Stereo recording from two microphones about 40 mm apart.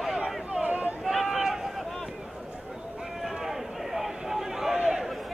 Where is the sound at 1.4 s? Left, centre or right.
Centre.